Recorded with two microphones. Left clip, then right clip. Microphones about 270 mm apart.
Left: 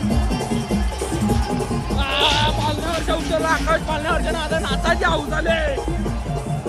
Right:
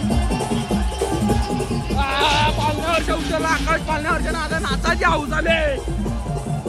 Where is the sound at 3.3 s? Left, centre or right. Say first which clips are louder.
Left 4 dB; centre.